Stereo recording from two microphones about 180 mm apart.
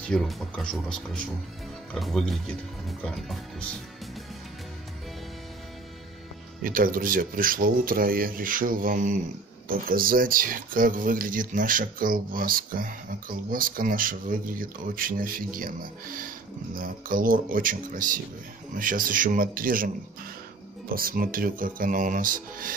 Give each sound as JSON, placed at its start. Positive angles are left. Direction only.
{"t": 0.1, "sound": "speech", "side_deg": 0}
{"t": 6.6, "sound": "speech", "side_deg": -50}
{"t": 20.9, "sound": "speech", "side_deg": -55}